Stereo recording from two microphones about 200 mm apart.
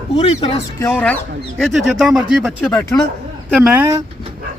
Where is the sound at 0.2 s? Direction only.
30° left (ahead or behind).